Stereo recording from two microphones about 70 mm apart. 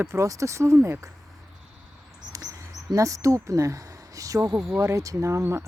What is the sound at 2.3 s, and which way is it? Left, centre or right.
Bird, right.